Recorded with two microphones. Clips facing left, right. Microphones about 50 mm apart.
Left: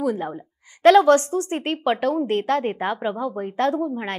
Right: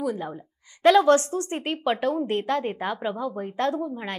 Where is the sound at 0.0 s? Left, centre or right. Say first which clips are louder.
Left 4 dB; left.